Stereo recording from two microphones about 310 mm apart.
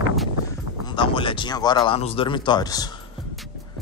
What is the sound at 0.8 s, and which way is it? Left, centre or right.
Speech, centre.